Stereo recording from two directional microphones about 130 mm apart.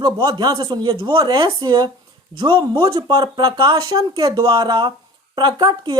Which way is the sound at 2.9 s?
30° right (ahead or behind).